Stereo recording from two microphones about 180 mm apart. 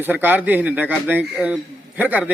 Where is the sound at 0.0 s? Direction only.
10° right (ahead or behind).